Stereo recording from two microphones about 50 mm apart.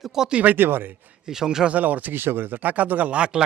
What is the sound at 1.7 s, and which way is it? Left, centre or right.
Speech, right.